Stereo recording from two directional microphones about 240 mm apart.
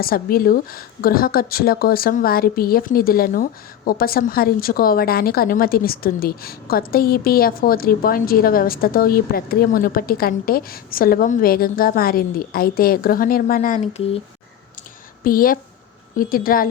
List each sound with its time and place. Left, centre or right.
0.0 s a woman's voice: left
15.2 s a woman's voice: left